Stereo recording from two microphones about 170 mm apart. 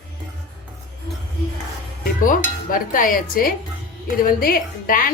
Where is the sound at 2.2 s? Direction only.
55° left (ahead or behind).